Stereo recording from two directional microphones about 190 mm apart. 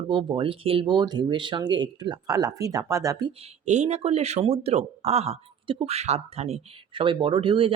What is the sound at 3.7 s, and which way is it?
Speech, 35° right (ahead or behind).